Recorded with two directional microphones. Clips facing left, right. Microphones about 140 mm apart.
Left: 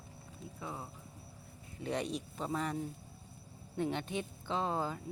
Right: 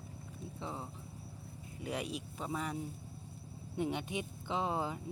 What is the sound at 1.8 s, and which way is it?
Speech, 10° right (ahead or behind).